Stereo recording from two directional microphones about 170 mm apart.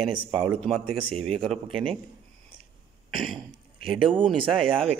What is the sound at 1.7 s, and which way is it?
Speech, 30° right (ahead or behind).